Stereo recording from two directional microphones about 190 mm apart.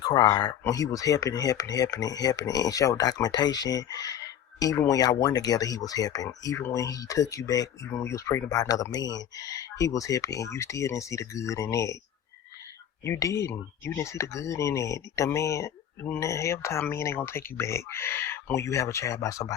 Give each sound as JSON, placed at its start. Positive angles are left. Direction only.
{"t": 0.0, "sound": "speech", "side_deg": 20}
{"t": 13.1, "sound": "speech", "side_deg": 15}